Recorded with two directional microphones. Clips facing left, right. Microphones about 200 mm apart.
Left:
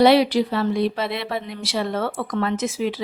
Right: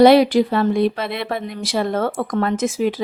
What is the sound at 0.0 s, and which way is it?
Speech, 45° right (ahead or behind).